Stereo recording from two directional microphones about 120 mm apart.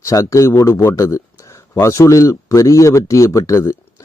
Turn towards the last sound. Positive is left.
turn(degrees=25)  # may be behind; listen again after turning